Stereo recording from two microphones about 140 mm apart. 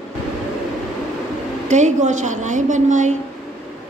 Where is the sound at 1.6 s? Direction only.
60° right (ahead or behind).